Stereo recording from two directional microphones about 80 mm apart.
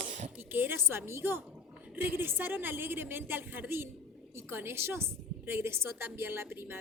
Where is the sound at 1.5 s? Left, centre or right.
Centre.